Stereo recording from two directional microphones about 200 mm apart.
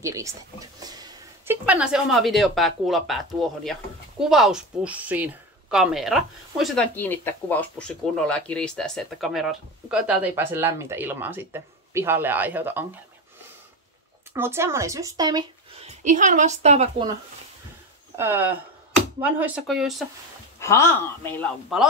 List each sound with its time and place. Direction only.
0.0 s a woman's voice: 15° right (ahead or behind)
14.3 s speech: 10° right (ahead or behind)
16.0 s a woman's voice: 40° right (ahead or behind)
18.1 s a woman's voice: 10° right (ahead or behind)
20.5 s speech: 15° left (ahead or behind)